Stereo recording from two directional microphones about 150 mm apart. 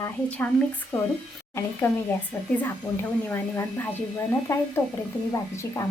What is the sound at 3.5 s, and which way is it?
A woman's voice, 15° left (ahead or behind).